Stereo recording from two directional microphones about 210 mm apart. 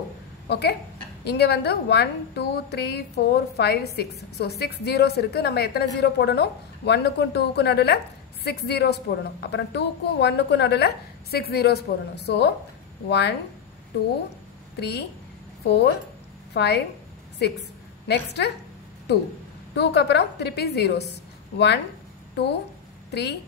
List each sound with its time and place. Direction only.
0.5 s a woman's voice: 50° left (ahead or behind)
14.8 s a woman's voice: 50° left (ahead or behind)
19.7 s a woman's voice: 55° left (ahead or behind)
22.3 s a woman's voice: 50° left (ahead or behind)